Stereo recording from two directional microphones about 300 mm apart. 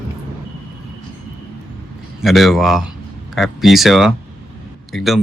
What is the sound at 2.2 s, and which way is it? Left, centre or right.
Speech, centre.